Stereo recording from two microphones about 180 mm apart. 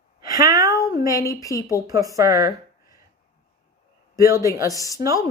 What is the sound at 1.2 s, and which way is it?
Speech, 20° left (ahead or behind).